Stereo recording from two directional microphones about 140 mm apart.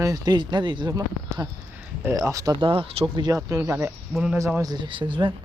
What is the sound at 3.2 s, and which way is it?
Speech, 25° right (ahead or behind).